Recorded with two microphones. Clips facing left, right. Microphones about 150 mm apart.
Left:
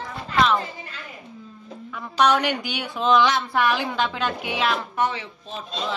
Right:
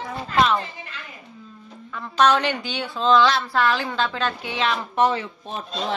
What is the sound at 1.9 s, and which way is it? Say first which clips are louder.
A woman's voice: right 1 dB; 10° left (ahead or behind).